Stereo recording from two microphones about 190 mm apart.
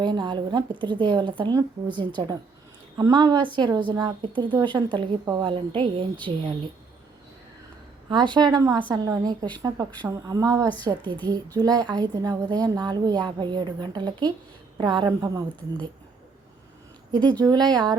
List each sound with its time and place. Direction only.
0.0 s a woman's voice: 25° right (ahead or behind)
8.1 s a woman's voice: 25° right (ahead or behind)
17.1 s a woman's voice: 20° right (ahead or behind)